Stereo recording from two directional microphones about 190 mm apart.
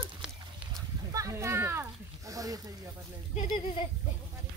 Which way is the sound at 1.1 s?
15° right (ahead or behind).